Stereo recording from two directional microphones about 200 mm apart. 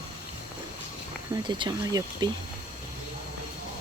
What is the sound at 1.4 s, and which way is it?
Speech, 25° right (ahead or behind).